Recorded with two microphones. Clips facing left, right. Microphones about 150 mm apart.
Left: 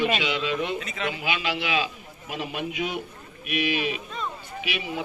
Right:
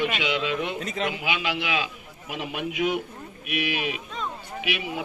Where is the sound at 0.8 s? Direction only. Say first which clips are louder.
Right 4 dB; 40° right (ahead or behind).